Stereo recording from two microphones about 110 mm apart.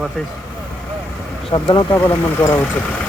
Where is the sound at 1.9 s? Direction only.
20° left (ahead or behind).